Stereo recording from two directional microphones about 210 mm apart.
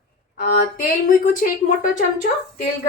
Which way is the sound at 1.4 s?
40° left (ahead or behind).